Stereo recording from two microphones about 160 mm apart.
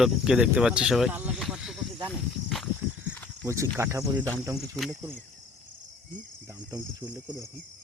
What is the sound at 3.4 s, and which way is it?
Speech, 20° right (ahead or behind).